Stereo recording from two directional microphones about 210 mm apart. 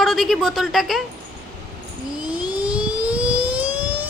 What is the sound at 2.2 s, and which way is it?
Ratchet, 5° right (ahead or behind).